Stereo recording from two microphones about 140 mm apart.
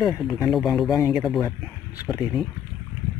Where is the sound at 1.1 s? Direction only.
Centre (ahead or behind).